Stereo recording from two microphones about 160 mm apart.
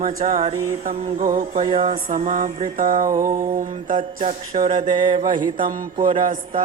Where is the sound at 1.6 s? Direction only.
35° right (ahead or behind).